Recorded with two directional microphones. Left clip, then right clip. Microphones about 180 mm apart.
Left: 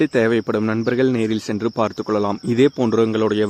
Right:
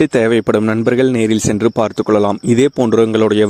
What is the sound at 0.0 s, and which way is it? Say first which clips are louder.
Speech: right 5 dB; 45° right (ahead or behind).